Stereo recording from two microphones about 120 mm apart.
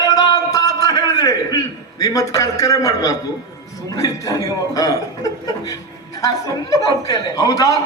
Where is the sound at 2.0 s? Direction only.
30° left (ahead or behind).